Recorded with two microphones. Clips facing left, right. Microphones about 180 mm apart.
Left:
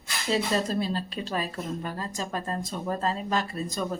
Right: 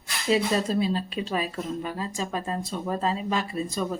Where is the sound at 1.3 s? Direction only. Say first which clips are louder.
Right 1 dB; 5° right (ahead or behind).